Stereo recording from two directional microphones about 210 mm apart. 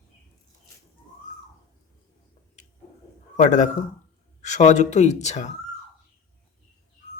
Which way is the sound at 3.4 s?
35° left (ahead or behind).